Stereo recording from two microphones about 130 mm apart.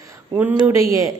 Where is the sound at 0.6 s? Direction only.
20° right (ahead or behind).